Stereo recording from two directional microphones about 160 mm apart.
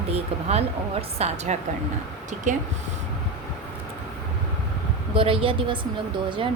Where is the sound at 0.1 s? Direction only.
40° right (ahead or behind).